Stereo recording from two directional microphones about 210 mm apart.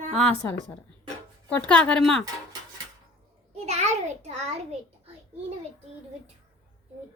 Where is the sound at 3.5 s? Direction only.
30° right (ahead or behind).